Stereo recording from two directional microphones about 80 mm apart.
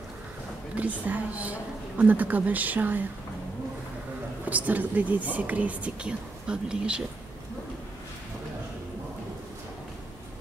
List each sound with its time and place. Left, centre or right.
0.7 s speech: centre
4.5 s speech: centre